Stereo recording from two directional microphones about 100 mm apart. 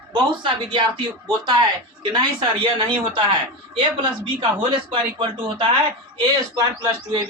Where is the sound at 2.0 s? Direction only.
50° right (ahead or behind).